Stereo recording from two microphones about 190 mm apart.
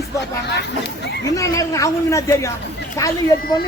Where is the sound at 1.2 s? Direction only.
15° left (ahead or behind).